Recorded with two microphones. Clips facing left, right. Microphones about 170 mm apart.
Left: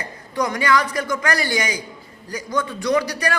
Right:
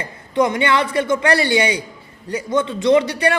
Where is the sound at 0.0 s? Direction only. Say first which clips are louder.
Right 6 dB; 25° right (ahead or behind).